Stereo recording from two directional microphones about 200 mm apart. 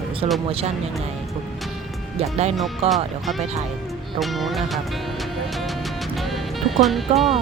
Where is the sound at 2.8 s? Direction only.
30° right (ahead or behind).